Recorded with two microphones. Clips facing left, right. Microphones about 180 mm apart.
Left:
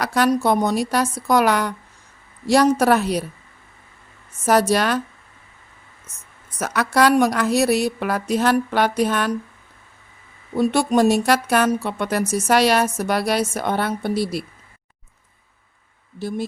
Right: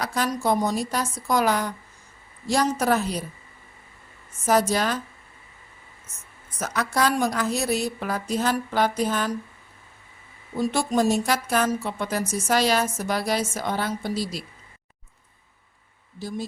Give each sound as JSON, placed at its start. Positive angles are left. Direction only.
{"t": 0.0, "sound": "speech", "side_deg": 70}
{"t": 4.4, "sound": "speech", "side_deg": 70}
{"t": 6.6, "sound": "speech", "side_deg": 75}
{"t": 10.5, "sound": "speech", "side_deg": 65}
{"t": 16.1, "sound": "speech", "side_deg": 60}